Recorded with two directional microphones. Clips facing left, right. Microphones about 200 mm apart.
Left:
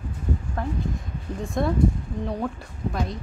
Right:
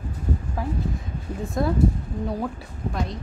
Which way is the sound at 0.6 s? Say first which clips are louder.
Right 1 dB; 5° right (ahead or behind).